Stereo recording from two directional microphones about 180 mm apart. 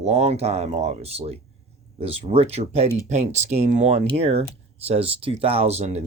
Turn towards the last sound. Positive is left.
turn(degrees=-35)  # may be behind; listen again after turning